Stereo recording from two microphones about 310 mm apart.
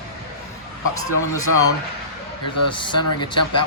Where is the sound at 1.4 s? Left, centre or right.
Left.